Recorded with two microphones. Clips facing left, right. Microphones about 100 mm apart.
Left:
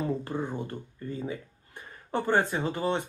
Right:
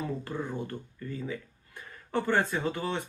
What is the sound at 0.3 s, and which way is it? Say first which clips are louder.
Speech: left 3 dB; 15° left (ahead or behind).